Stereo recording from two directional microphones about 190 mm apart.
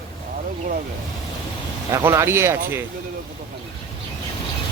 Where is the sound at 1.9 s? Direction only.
15° right (ahead or behind).